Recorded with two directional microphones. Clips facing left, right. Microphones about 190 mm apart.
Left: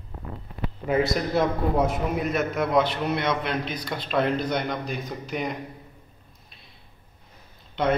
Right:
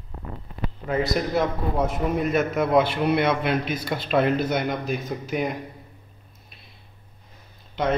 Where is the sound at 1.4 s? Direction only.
Centre (ahead or behind).